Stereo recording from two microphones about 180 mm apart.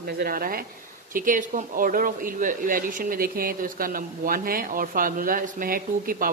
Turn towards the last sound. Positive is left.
turn(degrees=-55)  # may be behind; listen again after turning